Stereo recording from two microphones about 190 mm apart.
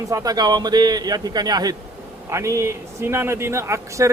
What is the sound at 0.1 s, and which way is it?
A man's voice, 20° right (ahead or behind).